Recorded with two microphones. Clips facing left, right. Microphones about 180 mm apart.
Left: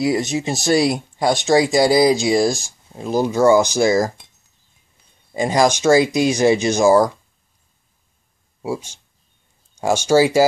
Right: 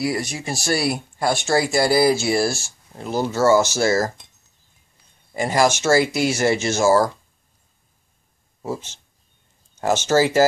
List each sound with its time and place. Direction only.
0.0 s speech: 20° left (ahead or behind)
5.3 s speech: 20° left (ahead or behind)
8.6 s speech: 10° left (ahead or behind)